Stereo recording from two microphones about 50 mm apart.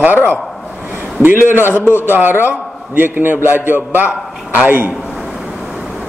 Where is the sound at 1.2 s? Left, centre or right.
Right.